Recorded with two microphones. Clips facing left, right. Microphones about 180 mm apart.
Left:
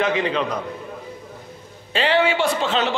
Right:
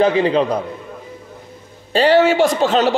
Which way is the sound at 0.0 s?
35° right (ahead or behind).